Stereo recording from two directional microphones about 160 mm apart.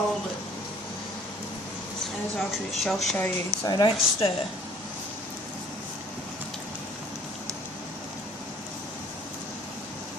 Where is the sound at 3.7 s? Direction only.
25° left (ahead or behind).